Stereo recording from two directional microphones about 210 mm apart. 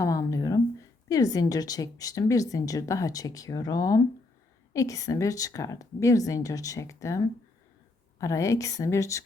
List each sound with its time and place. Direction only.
0.0 s a woman's voice: 15° left (ahead or behind)